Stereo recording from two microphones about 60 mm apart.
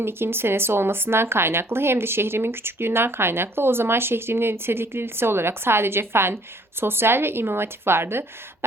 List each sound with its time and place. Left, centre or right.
0.0 s speech: right